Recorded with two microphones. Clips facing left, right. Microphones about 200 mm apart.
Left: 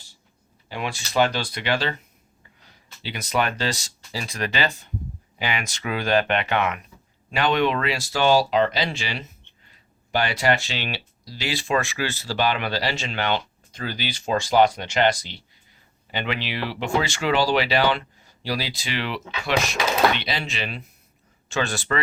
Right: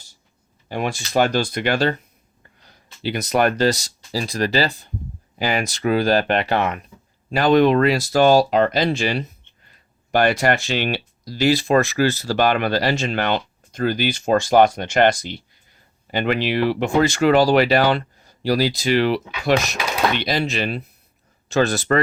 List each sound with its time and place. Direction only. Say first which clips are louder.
0.7 s speech: right 5 dB; 45° right (ahead or behind)